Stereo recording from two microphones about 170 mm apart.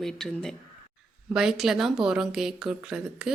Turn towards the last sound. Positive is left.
turn(degrees=-5)  # may be behind; listen again after turning